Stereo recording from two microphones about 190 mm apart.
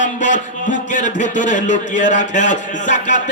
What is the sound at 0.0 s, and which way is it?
Speech, 40° left (ahead or behind).